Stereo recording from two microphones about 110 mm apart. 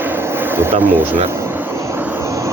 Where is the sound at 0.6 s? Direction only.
20° right (ahead or behind).